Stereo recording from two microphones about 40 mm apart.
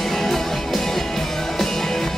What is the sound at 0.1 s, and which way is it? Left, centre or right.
Music, centre.